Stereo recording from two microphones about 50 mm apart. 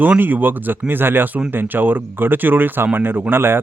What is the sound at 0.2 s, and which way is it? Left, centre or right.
Speech, right.